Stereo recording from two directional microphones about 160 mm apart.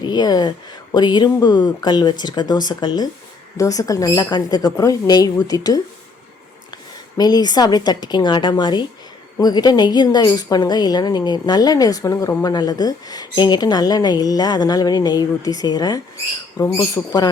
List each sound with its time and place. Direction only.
0.0 s a woman's voice: 25° left (ahead or behind)
7.2 s a woman's voice: 25° left (ahead or behind)